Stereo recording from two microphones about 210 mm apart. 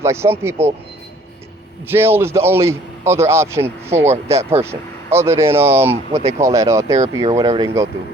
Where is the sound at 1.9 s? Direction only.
10° right (ahead or behind).